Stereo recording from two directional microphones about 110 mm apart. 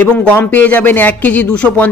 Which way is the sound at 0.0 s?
15° left (ahead or behind).